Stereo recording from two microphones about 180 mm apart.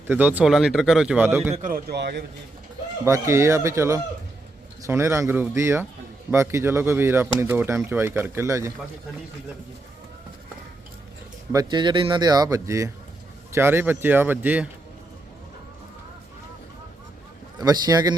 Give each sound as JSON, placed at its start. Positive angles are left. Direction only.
{"t": 0.1, "sound": "speech", "side_deg": -10}
{"t": 1.5, "sound": "speech", "side_deg": -45}
{"t": 1.9, "sound": "a man's voice", "side_deg": -65}
{"t": 3.0, "sound": "speech", "side_deg": -15}
{"t": 11.5, "sound": "speech", "side_deg": -25}
{"t": 17.6, "sound": "speech", "side_deg": -20}